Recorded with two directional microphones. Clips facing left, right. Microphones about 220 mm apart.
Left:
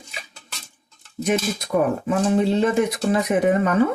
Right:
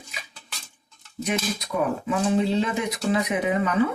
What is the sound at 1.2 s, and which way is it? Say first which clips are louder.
Speech: left 5 dB; 50° left (ahead or behind).